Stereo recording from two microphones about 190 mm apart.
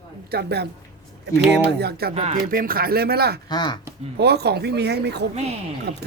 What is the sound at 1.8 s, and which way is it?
Speech, 55° right (ahead or behind).